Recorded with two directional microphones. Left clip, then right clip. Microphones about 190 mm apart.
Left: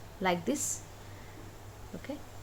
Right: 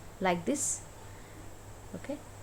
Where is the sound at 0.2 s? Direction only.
5° right (ahead or behind).